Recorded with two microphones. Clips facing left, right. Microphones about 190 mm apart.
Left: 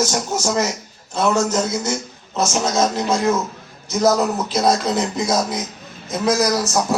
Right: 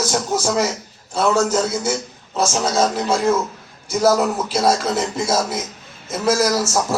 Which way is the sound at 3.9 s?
10° right (ahead or behind).